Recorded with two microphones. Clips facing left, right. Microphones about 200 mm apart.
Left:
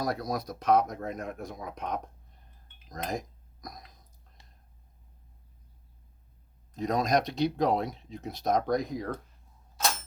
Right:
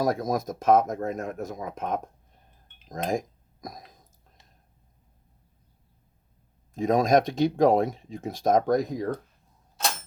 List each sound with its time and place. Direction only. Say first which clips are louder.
0.0 s speech: right 6 dB; 45° right (ahead or behind)
6.7 s speech: right 6 dB; 50° right (ahead or behind)